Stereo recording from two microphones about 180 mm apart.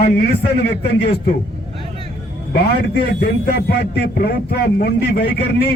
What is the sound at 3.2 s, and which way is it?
A man's voice, 65° left (ahead or behind).